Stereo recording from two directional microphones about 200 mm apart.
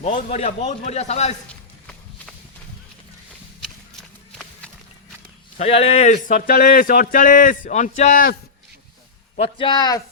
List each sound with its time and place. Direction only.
0.0 s a man's voice: 35° left (ahead or behind)
5.5 s speech: 30° left (ahead or behind)
9.6 s speech: 25° left (ahead or behind)